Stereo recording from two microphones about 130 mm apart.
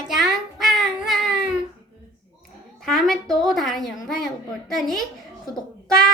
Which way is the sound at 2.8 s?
5° left (ahead or behind).